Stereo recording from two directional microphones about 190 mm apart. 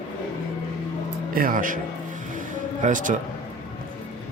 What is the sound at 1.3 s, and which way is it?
Speech, 45° right (ahead or behind).